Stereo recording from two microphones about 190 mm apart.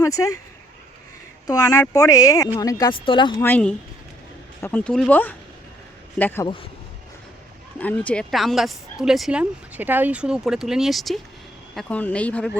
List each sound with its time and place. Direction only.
0.0 s speech: 15° left (ahead or behind)
1.5 s speech: 15° left (ahead or behind)
3.4 s speech: 10° left (ahead or behind)
7.8 s speech: 10° left (ahead or behind)